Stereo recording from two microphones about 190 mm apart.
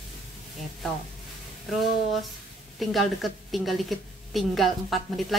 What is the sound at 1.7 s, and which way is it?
A woman's voice, centre (ahead or behind).